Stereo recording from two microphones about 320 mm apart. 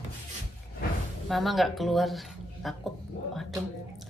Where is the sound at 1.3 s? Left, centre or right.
Centre.